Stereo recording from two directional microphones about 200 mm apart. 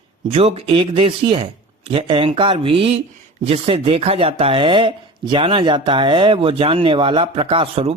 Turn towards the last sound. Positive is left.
turn(degrees=-30)  # may be behind; listen again after turning